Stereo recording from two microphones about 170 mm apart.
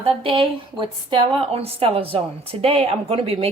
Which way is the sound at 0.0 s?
30° right (ahead or behind).